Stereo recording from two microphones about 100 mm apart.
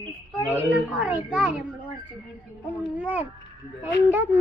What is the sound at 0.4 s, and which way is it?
Child singing, 15° right (ahead or behind).